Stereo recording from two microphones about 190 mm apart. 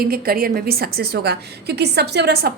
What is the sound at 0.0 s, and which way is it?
A woman's voice, 55° right (ahead or behind).